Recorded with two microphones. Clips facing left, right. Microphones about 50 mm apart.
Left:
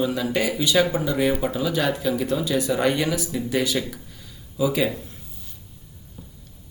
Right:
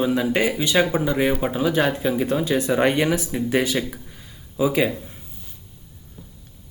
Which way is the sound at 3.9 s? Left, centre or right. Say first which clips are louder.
Right 1 dB; right.